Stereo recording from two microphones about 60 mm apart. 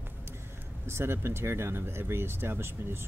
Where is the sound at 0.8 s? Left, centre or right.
Right.